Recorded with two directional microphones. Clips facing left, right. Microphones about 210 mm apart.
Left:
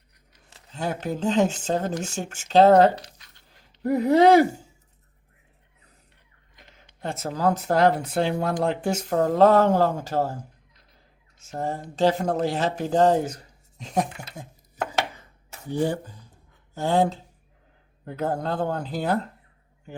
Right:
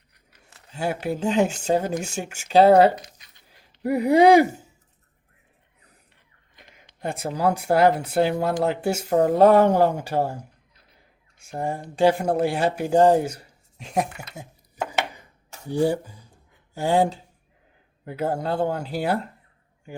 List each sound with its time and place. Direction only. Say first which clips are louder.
0.3 s speech: right 1 dB; 10° right (ahead or behind)
6.7 s speech: right 2 dB; 15° right (ahead or behind)
14.3 s chopping: even; 10° right (ahead or behind)
15.6 s speech: right 3 dB; 10° right (ahead or behind)